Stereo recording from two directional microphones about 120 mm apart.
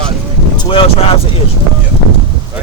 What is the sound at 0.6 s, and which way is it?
Speech, 50° left (ahead or behind).